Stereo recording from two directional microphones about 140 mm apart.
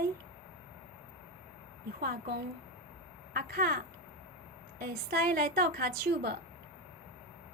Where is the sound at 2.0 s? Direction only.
90° right.